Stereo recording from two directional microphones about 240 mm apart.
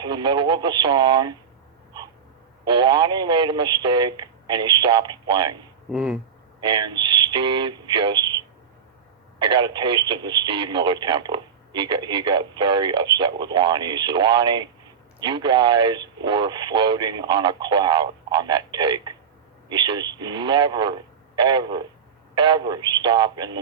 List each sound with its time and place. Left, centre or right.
0.0 s speech: centre
2.6 s speech: centre
5.9 s speech: centre
6.6 s speech: centre